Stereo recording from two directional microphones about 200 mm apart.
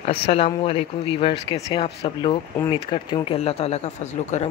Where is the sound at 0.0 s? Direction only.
30° left (ahead or behind).